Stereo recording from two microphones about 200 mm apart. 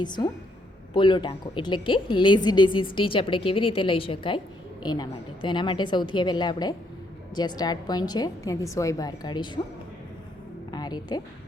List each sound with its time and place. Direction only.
0.0 s a woman's voice: 20° left (ahead or behind)
10.7 s music: 20° left (ahead or behind)